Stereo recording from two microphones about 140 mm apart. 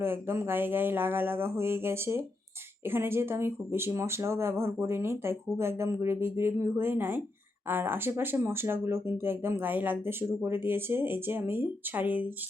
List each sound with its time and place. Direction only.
0.0 s speech: 15° right (ahead or behind)